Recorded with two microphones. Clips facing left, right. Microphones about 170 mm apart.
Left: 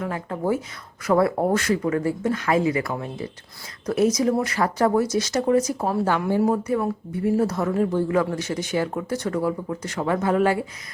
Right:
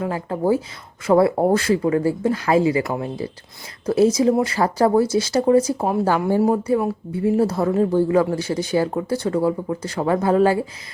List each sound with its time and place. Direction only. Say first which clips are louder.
0.0 s speech: right 4 dB; 30° right (ahead or behind)